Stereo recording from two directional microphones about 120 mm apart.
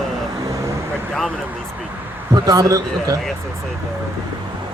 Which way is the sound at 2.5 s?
30° right (ahead or behind).